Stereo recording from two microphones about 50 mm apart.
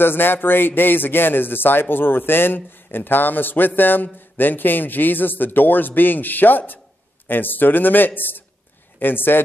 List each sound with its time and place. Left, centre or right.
0.0 s a man's voice: left